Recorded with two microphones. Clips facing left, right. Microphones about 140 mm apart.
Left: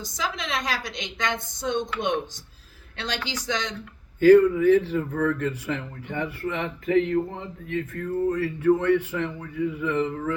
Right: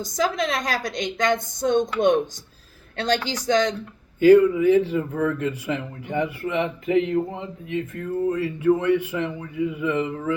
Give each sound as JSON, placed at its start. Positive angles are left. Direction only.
{"t": 0.1, "sound": "a woman's voice", "side_deg": -40}
{"t": 3.0, "sound": "a woman's voice", "side_deg": -40}
{"t": 4.2, "sound": "speech", "side_deg": -15}